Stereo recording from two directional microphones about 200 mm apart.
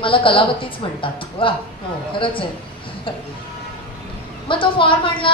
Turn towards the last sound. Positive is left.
turn(degrees=25)  # may be behind; listen again after turning